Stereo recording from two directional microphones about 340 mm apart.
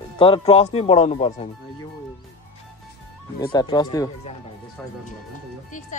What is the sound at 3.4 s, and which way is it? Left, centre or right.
Speech, centre.